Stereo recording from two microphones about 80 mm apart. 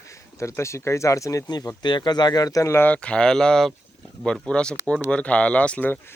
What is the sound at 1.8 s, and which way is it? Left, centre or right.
Speech, left.